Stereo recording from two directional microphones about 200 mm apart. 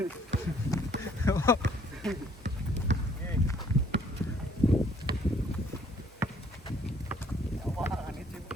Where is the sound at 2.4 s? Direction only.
60° right (ahead or behind).